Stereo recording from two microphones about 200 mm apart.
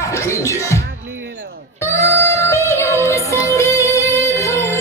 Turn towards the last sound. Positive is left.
turn(degrees=15)  # may be behind; listen again after turning